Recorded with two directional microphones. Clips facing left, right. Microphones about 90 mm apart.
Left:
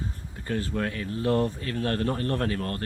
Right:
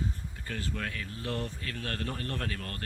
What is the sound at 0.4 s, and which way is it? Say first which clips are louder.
Speech: left 8 dB; 35° left (ahead or behind).